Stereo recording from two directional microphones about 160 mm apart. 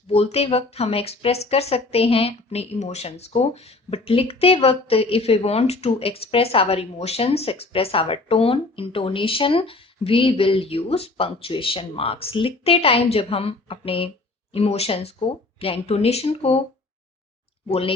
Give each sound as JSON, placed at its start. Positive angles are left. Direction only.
{"t": 0.1, "sound": "speech", "side_deg": 40}
{"t": 17.7, "sound": "speech", "side_deg": 35}